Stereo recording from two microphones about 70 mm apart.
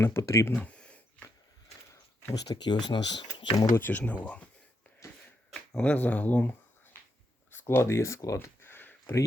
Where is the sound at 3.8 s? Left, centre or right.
Left.